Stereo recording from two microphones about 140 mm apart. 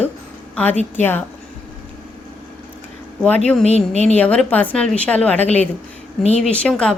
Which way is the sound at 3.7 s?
50° left (ahead or behind).